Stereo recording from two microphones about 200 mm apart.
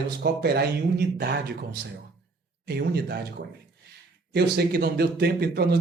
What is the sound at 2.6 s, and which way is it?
Speech, 55° right (ahead or behind).